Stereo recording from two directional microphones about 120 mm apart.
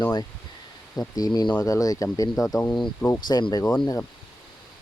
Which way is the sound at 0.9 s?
30° left (ahead or behind).